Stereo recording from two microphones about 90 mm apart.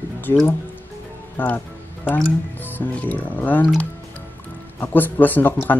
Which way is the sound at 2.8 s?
15° left (ahead or behind).